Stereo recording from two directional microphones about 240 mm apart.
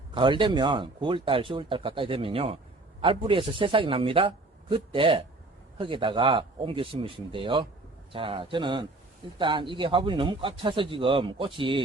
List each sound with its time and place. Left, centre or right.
0.1 s speech: right